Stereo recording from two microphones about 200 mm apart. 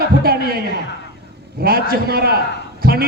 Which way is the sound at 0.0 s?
50° right (ahead or behind).